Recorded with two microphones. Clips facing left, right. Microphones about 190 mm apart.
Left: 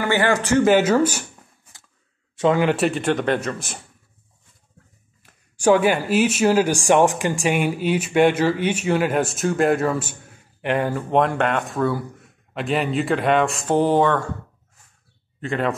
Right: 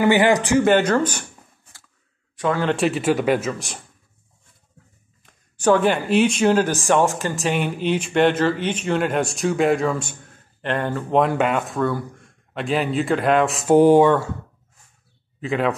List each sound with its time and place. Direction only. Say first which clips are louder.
0.0 s speech: right 4 dB; 15° right (ahead or behind)
0.7 s speech: left 3 dB; 5° left (ahead or behind)
2.3 s a man's voice: left 4 dB; 25° left (ahead or behind)
2.6 s speech: even; centre (ahead or behind)
5.2 s speech: left 1 dB; 10° left (ahead or behind); by 14.3 s 10° right (ahead or behind)
15.4 s speech: right 2 dB; centre (ahead or behind)